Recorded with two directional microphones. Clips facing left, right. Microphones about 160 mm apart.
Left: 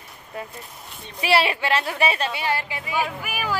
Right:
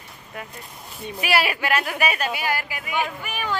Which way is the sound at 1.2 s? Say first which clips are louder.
Left 2 dB; 30° left (ahead or behind).